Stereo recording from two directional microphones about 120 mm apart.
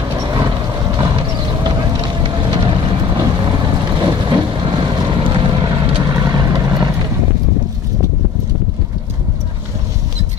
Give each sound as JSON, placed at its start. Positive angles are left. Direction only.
{"t": 0.0, "sound": "vehicle", "side_deg": -30}
{"t": 6.1, "sound": "vehicle", "side_deg": -30}